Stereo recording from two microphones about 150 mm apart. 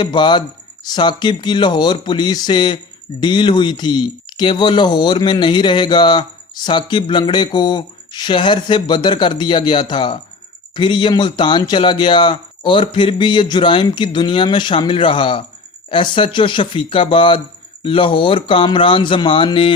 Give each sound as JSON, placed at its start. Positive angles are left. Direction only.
{"t": 0.0, "sound": "speech", "side_deg": 30}